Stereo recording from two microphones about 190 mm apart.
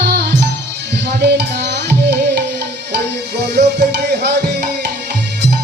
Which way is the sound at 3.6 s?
60° right (ahead or behind).